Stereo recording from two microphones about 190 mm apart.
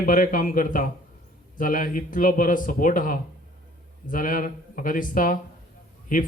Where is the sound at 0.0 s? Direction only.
45° left (ahead or behind).